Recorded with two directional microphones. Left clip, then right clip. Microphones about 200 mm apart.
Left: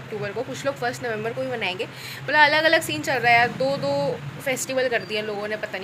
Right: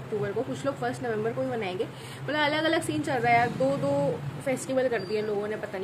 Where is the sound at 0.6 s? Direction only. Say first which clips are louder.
Left 7 dB; 10° right (ahead or behind).